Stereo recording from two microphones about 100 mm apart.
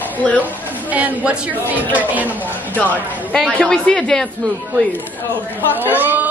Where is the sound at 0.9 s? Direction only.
15° right (ahead or behind).